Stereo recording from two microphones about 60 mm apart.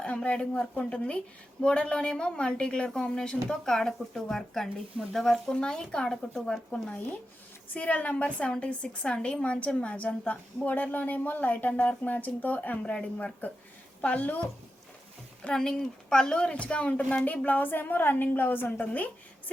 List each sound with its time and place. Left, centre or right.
0.0 s a woman's voice: centre
6.8 s a woman's voice: left
15.4 s a woman's voice: centre